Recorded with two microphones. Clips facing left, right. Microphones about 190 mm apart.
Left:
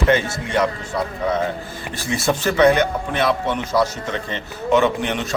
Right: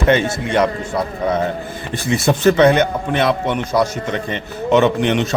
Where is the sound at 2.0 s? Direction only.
20° right (ahead or behind).